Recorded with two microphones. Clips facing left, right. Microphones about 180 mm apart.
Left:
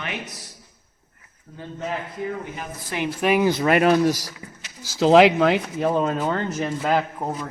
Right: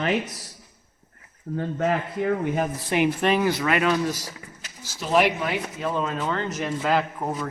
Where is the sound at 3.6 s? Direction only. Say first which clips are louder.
Left 5 dB; 45° left (ahead or behind).